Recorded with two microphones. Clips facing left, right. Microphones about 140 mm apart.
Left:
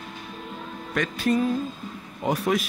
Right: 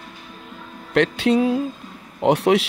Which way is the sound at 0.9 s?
75° right (ahead or behind).